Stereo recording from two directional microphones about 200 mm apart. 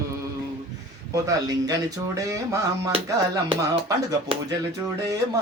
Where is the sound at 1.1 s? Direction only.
15° right (ahead or behind).